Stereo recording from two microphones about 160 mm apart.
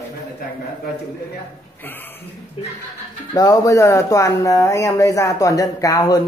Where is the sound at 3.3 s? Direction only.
25° left (ahead or behind).